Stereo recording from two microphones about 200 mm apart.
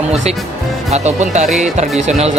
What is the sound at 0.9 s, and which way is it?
Speech, 35° right (ahead or behind).